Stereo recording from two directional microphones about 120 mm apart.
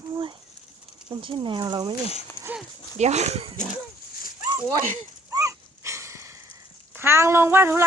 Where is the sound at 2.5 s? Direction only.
10° right (ahead or behind).